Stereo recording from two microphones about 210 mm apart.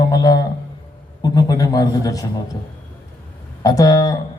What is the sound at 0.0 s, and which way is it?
A man's voice, 20° left (ahead or behind).